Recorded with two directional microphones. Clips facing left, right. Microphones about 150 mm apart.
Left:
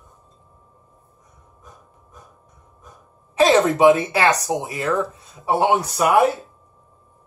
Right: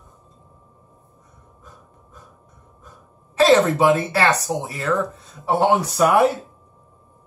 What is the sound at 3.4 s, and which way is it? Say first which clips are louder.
Speech: even; 15° left (ahead or behind).